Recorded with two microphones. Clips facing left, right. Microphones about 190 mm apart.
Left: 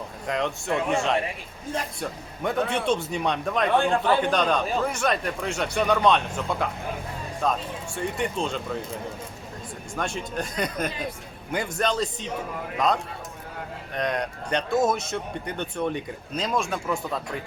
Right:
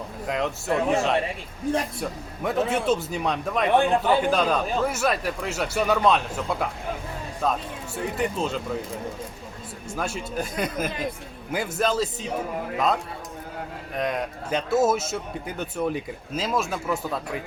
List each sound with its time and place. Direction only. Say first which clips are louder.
0.3 s a man's voice: right 1 dB; 5° right (ahead or behind)
3.7 s speech: right 3 dB; 20° right (ahead or behind)
4.0 s a man's voice: right 1 dB; 5° right (ahead or behind)
9.9 s a man's voice: right 1 dB; 5° right (ahead or behind)